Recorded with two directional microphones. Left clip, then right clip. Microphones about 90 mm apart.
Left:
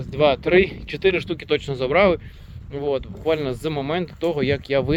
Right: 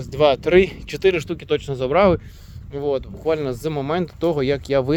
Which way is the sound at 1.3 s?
5° right (ahead or behind).